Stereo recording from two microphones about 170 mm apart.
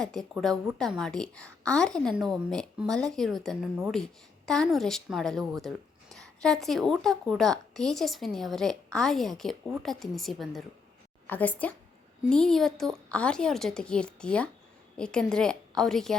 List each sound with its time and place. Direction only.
0.0 s a woman's voice: 5° left (ahead or behind)